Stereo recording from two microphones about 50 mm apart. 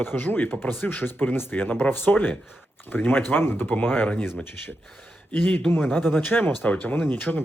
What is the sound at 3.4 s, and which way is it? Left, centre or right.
Speech, left.